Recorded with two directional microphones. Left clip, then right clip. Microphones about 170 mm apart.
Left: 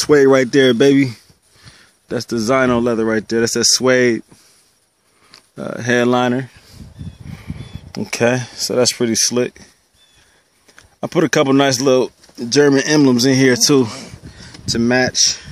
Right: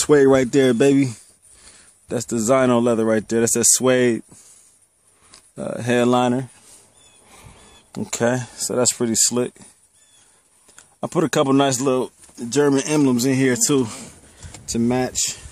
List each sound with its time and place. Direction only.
0.0 s speech: 5° right (ahead or behind)
5.3 s speech: 5° left (ahead or behind)
7.9 s speech: 5° left (ahead or behind)
10.8 s speech: 5° left (ahead or behind)
11.9 s speech: 20° left (ahead or behind)